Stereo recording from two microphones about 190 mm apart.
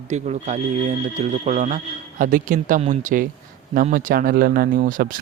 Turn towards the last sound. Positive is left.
turn(degrees=-45)  # may be behind; listen again after turning